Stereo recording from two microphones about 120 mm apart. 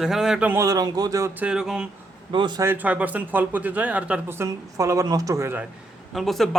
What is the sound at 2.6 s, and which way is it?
Speech, 15° right (ahead or behind).